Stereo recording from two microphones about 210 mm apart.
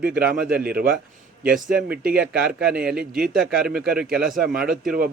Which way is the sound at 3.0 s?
45° right (ahead or behind).